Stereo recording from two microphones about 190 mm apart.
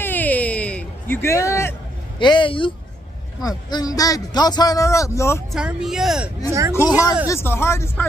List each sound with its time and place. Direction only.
0.0 s a sound: 10° left (ahead or behind)
2.1 s speech: 25° left (ahead or behind)
5.5 s speech: 5° right (ahead or behind)
6.9 s speech: 20° left (ahead or behind)